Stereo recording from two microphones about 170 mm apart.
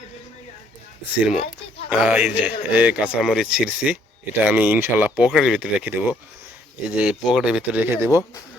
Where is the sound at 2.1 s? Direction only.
10° right (ahead or behind).